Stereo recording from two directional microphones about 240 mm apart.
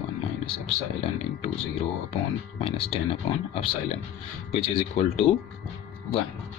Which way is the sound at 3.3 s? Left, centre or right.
Left.